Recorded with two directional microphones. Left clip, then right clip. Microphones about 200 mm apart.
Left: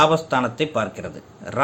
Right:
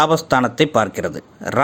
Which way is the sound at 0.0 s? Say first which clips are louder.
Right 2 dB; 40° right (ahead or behind).